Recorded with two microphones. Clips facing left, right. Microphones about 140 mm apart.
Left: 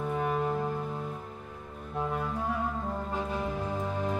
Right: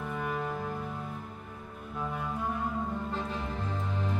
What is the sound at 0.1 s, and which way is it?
Music, 45° left (ahead or behind).